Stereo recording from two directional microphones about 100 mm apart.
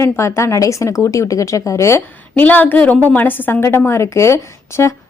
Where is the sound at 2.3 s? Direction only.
15° left (ahead or behind).